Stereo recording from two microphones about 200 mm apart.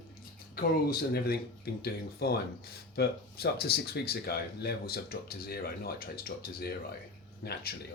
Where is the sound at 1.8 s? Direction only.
50° left (ahead or behind).